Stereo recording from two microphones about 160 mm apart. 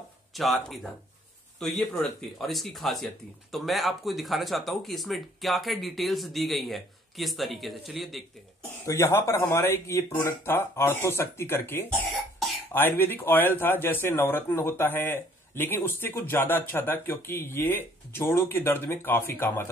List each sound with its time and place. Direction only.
0.3 s speech: centre (ahead or behind)
8.8 s speech: 20° left (ahead or behind)